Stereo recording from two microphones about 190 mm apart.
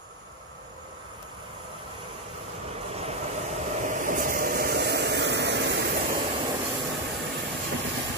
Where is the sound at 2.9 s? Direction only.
35° right (ahead or behind); by 6.2 s 65° right (ahead or behind).